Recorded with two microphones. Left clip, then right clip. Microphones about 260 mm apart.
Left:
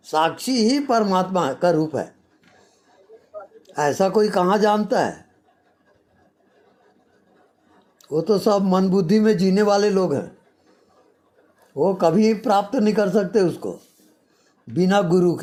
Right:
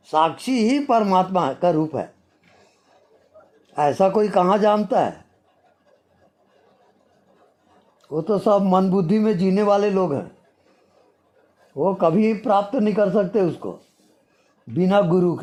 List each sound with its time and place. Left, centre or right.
0.0 s speech: centre
3.7 s speech: centre
8.0 s a man's voice: centre
11.7 s speech: centre